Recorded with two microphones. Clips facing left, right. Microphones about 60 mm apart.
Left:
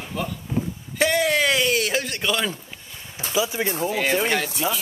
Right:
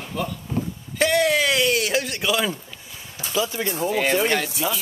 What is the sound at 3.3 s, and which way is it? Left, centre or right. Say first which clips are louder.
Speech: left 1 dB; centre.